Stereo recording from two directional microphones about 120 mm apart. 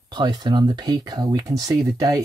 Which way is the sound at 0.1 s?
35° right (ahead or behind).